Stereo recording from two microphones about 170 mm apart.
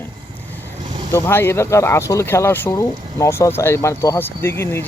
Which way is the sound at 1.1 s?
15° left (ahead or behind).